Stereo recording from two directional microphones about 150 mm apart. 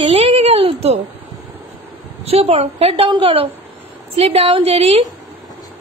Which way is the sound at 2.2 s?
40° right (ahead or behind).